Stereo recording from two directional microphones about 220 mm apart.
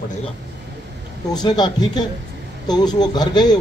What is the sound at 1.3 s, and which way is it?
A man's voice, 20° left (ahead or behind).